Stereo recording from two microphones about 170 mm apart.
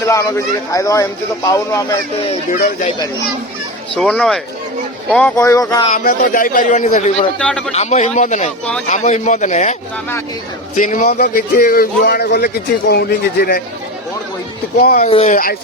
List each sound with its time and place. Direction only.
0.0 s speech: 20° left (ahead or behind)
2.5 s speech: 55° left (ahead or behind)
3.9 s speech: 5° left (ahead or behind)
5.4 s speech: 20° left (ahead or behind)
5.9 s a man's voice: 55° left (ahead or behind)
7.3 s speech: 5° left (ahead or behind)
7.7 s a man's voice: 40° left (ahead or behind)
10.8 s speech: 50° left (ahead or behind); by 13.6 s 65° left (ahead or behind)
14.8 s speech: 65° left (ahead or behind)
15.0 s speech: 40° left (ahead or behind)